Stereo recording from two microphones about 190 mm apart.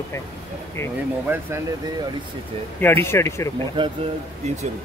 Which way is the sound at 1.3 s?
10° right (ahead or behind).